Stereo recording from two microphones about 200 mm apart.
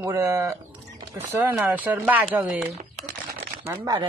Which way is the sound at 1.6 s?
10° right (ahead or behind).